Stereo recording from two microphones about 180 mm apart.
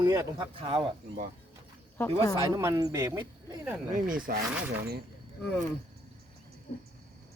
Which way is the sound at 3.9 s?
50° right (ahead or behind).